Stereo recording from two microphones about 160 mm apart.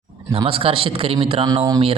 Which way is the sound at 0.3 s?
35° right (ahead or behind).